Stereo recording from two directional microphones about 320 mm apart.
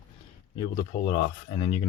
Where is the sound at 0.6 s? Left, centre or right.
Left.